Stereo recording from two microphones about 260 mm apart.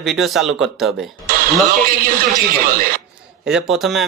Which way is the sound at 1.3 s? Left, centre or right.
Right.